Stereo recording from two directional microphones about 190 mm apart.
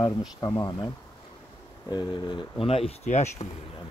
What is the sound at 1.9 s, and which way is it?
Speech, 25° left (ahead or behind).